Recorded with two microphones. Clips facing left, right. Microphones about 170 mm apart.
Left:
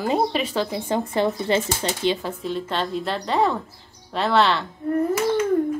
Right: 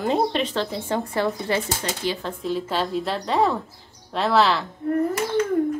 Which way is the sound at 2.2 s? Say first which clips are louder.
Right 1 dB; centre (ahead or behind).